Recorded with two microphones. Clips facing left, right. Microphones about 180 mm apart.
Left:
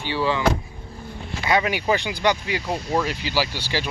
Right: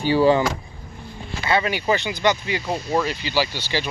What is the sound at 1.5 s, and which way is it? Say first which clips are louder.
Speech: even; 10° left (ahead or behind).